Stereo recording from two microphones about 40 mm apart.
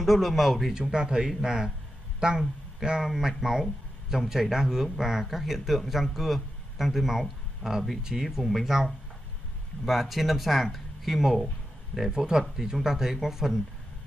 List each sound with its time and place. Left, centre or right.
0.0 s speech: centre
0.7 s a man's voice: centre
8.5 s speech: centre
9.8 s speech: centre
12.1 s speech: centre